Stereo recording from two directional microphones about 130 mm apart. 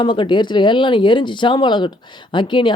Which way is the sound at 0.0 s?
40° left (ahead or behind).